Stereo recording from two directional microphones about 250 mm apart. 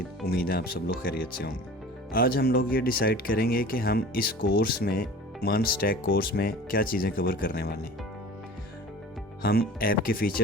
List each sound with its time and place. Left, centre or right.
0.3 s speech: left
9.4 s speech: left